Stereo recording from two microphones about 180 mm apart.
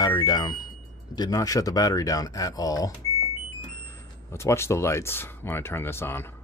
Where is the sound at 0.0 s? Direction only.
25° left (ahead or behind).